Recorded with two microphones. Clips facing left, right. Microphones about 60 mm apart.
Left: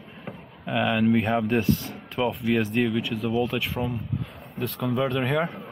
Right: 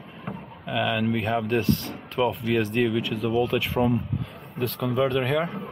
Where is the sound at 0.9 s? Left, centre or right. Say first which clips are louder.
Left 3 dB; centre.